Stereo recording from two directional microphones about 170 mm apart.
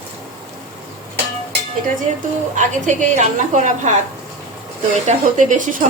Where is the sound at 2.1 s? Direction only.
40° right (ahead or behind).